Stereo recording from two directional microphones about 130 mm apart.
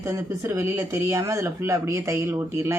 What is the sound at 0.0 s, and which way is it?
Speech, 20° right (ahead or behind).